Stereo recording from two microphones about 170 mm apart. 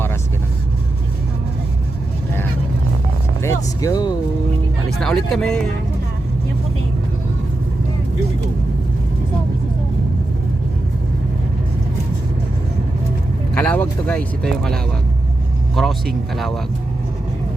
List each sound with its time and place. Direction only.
3.4 s a sound: 15° left (ahead or behind)
4.9 s speech: centre (ahead or behind)
13.5 s speech: 10° left (ahead or behind)